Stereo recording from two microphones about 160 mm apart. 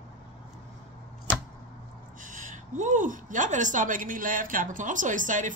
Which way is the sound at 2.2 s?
55° right (ahead or behind).